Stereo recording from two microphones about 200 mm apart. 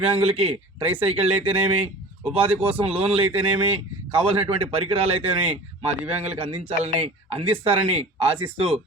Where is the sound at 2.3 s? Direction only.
30° right (ahead or behind).